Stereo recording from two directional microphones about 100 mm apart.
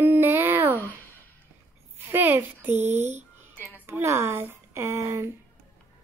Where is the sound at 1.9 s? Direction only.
20° right (ahead or behind).